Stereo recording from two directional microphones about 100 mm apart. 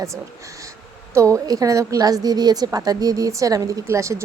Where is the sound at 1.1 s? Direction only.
30° right (ahead or behind).